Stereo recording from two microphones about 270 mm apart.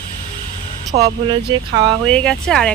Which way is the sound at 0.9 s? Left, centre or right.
Centre.